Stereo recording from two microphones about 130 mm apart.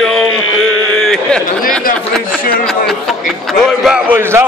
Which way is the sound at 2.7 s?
Centre (ahead or behind).